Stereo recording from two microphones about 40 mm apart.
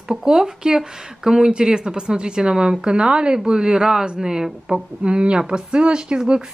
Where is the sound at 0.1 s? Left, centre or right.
Centre.